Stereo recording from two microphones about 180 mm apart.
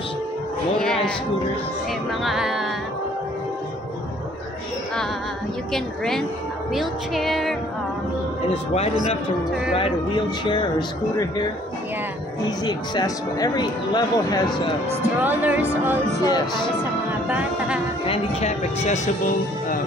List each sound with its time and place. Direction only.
2.2 s music: 5° right (ahead or behind)
5.7 s music: centre (ahead or behind)
9.8 s speech: 30° left (ahead or behind)
12.4 s speech: 20° left (ahead or behind)
15.2 s speech: 10° right (ahead or behind)
16.2 s speech: 20° left (ahead or behind)
18.0 s speech: 35° left (ahead or behind)